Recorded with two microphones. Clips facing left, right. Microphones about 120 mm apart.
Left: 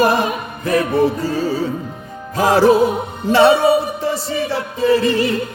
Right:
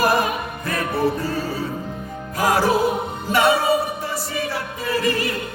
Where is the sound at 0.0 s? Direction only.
25° left (ahead or behind).